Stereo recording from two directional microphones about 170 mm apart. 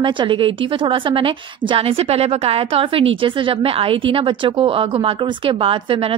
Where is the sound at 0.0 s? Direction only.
30° right (ahead or behind).